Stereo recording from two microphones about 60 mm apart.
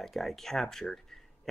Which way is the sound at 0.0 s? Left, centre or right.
Centre.